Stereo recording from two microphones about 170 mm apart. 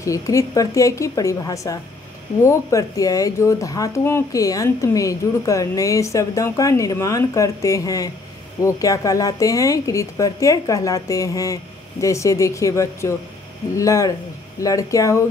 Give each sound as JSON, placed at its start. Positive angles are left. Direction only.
{"t": 0.0, "sound": "speech", "side_deg": 20}